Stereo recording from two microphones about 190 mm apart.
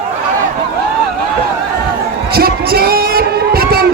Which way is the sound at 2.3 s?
55° right (ahead or behind).